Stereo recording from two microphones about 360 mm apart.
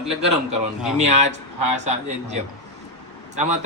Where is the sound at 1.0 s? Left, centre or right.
Centre.